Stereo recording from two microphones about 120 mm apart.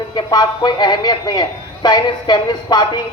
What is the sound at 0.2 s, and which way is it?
Speech, 35° left (ahead or behind).